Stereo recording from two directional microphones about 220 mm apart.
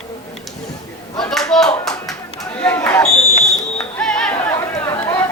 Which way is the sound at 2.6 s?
10° left (ahead or behind).